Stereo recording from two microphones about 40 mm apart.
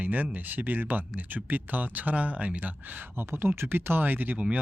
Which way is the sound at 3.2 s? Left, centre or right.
Right.